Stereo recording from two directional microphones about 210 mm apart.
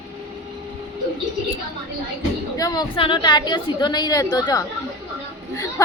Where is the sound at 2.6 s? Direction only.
20° left (ahead or behind).